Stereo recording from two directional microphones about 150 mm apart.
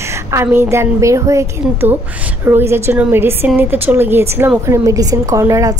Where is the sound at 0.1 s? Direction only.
20° right (ahead or behind).